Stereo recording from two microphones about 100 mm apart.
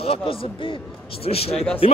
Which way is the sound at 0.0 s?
70° left (ahead or behind).